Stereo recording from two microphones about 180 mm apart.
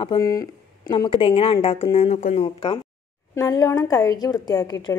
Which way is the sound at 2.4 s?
30° left (ahead or behind).